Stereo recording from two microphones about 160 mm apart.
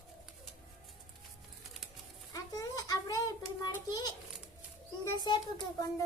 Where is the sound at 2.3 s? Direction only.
20° left (ahead or behind).